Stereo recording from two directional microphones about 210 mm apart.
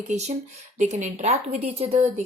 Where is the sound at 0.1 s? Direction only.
30° right (ahead or behind).